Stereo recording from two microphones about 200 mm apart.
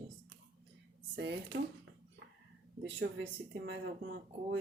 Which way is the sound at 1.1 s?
60° right (ahead or behind).